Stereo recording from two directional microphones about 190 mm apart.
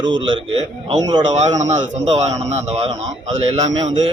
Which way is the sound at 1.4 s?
35° right (ahead or behind).